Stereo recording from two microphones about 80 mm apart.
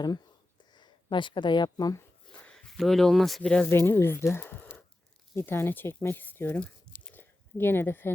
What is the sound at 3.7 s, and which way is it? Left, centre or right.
Speech, left.